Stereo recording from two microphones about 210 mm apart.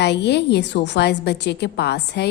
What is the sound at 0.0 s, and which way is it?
A woman's voice, 55° left (ahead or behind).